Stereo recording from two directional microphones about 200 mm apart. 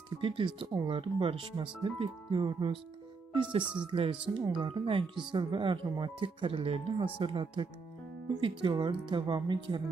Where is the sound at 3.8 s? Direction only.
25° right (ahead or behind).